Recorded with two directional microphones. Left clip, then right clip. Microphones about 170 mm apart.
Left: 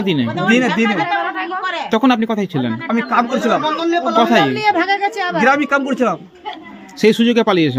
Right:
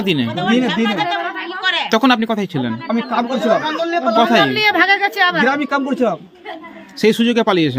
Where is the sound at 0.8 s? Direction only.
35° left (ahead or behind).